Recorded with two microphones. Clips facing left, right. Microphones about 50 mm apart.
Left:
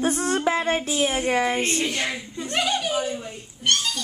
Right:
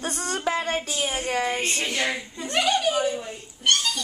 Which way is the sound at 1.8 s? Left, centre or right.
Centre.